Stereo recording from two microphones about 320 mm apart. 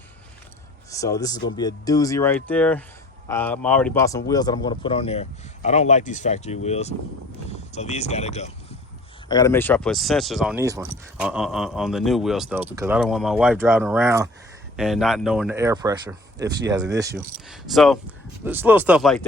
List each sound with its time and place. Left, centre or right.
0.9 s speech: centre
9.3 s speech: centre
17.5 s speech: centre